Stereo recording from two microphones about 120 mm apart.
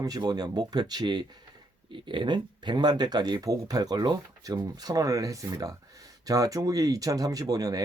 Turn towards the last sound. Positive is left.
turn(degrees=-30)  # may be behind; listen again after turning